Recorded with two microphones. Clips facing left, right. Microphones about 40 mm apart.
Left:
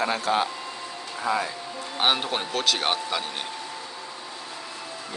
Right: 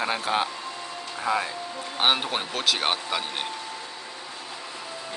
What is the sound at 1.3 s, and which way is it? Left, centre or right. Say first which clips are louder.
Speech: even; right.